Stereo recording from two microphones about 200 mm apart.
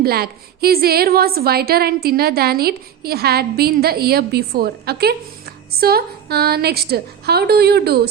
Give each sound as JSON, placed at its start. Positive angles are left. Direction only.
{"t": 0.0, "sound": "a woman's voice", "side_deg": -50}